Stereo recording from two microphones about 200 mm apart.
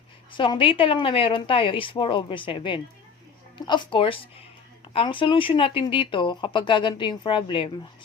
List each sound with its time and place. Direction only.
0.3 s speech: 25° left (ahead or behind)